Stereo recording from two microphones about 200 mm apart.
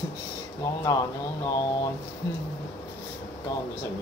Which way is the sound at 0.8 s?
15° left (ahead or behind).